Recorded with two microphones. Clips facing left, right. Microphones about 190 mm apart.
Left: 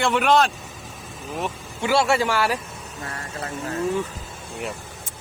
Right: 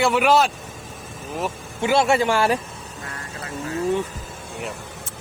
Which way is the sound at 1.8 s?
20° right (ahead or behind).